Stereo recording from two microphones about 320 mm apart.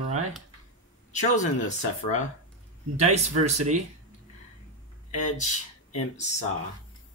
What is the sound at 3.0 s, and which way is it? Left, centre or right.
Speech, right.